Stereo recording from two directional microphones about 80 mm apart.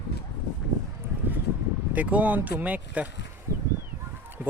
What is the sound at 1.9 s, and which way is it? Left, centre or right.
Speech, centre.